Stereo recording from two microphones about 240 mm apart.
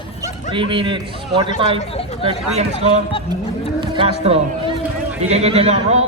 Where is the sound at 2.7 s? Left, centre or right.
Left.